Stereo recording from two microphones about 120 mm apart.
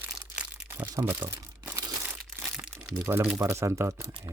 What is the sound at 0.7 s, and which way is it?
Speech, 20° right (ahead or behind).